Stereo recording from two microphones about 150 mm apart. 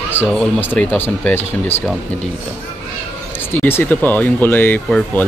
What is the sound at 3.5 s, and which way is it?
Speech, 15° left (ahead or behind).